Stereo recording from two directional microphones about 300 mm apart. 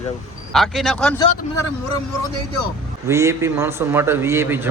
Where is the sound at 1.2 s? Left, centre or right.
Left.